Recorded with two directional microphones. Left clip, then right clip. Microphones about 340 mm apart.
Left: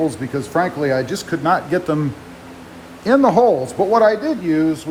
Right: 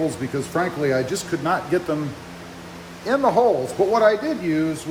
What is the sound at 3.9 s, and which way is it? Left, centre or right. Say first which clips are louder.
Speech: left 4 dB; centre.